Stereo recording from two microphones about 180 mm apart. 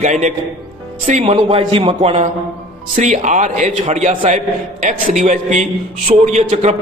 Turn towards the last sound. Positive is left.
turn(degrees=-40)  # may be behind; listen again after turning